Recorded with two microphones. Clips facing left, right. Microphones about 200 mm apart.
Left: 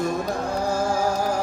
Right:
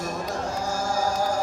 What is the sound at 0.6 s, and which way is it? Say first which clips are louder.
Chant: left 4 dB; 60° left (ahead or behind).